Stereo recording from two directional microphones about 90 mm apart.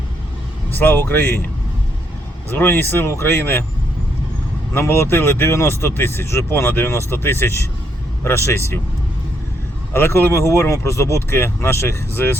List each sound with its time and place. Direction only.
0.7 s speech: 25° left (ahead or behind)
2.5 s speech: 25° left (ahead or behind)
4.7 s speech: 30° left (ahead or behind)
9.9 s speech: 25° left (ahead or behind)